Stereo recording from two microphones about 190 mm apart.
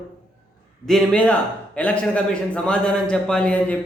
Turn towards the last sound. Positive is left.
turn(degrees=5)  # may be behind; listen again after turning